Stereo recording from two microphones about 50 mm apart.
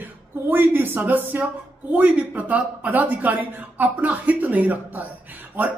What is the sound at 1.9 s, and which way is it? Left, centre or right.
Speech, right.